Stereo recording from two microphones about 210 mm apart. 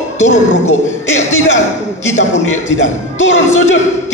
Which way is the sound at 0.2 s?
35° left (ahead or behind).